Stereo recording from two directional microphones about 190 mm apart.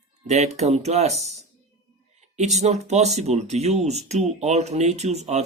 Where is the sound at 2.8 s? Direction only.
35° right (ahead or behind).